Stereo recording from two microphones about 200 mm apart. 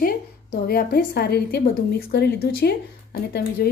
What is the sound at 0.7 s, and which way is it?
A woman's voice, 50° left (ahead or behind).